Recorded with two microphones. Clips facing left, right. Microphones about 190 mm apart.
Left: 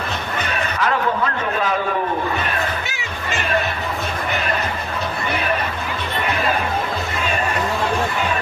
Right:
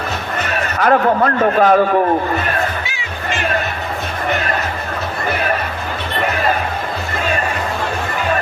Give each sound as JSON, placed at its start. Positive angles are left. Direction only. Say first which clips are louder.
{"t": 0.7, "sound": "a man's voice", "louder": "right 8 dB", "side_deg": -50}